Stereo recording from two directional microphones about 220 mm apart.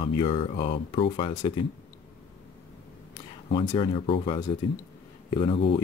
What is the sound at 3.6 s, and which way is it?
Speech, 20° left (ahead or behind).